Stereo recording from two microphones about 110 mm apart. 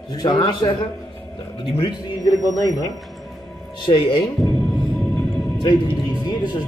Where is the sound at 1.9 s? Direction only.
35° left (ahead or behind).